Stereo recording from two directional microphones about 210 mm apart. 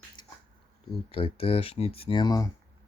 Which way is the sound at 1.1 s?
25° left (ahead or behind).